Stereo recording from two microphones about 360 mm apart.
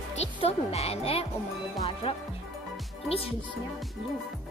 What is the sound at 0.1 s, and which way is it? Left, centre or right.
Speech, centre.